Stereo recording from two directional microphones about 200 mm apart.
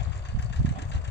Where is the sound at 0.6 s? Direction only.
60° left (ahead or behind).